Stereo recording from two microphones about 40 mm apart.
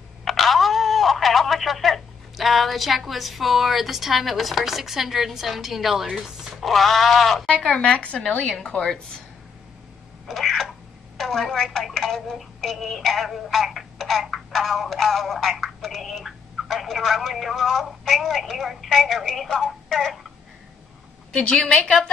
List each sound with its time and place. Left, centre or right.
0.2 s speech: centre
6.6 s speech: centre
7.4 s a woman's voice: centre
10.2 s a sound: centre
11.1 s a woman's voice: centre
13.9 s a sound: centre
14.5 s a woman's voice: centre